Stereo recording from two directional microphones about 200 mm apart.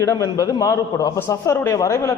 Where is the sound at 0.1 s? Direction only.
15° left (ahead or behind).